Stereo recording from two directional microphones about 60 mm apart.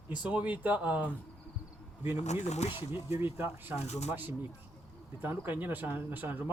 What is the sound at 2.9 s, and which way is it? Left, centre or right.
Speech, right.